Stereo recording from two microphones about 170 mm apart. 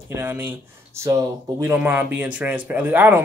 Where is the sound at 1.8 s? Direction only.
10° right (ahead or behind).